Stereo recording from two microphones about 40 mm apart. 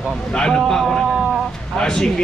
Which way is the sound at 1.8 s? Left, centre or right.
Centre.